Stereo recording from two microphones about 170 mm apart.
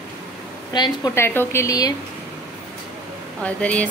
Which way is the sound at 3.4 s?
10° left (ahead or behind).